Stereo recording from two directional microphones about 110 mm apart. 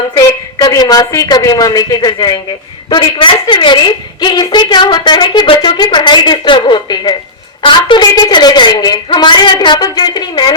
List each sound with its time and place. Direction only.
0.2 s a woman's voice: 35° left (ahead or behind)